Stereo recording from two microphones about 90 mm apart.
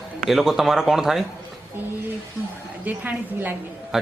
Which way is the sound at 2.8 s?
20° right (ahead or behind).